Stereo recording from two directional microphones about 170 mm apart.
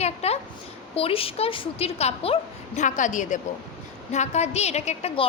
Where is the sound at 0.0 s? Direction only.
35° left (ahead or behind).